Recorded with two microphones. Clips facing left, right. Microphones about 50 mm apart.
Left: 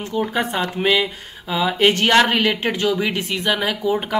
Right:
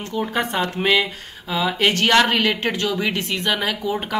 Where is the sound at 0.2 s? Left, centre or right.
Centre.